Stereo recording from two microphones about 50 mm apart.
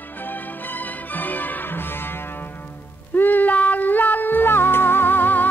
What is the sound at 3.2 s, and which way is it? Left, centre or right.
Music, left.